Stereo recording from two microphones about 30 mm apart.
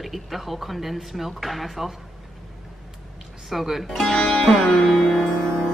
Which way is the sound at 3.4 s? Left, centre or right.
Centre.